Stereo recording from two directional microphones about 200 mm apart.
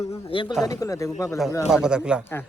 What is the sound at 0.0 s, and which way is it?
Speech, 30° left (ahead or behind).